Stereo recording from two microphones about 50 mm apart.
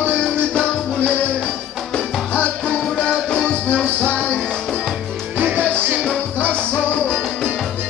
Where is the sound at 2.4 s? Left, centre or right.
Left.